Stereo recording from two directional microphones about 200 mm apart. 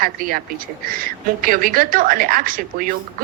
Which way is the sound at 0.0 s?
45° right (ahead or behind).